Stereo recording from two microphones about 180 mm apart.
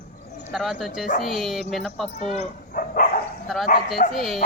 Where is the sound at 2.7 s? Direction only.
50° left (ahead or behind).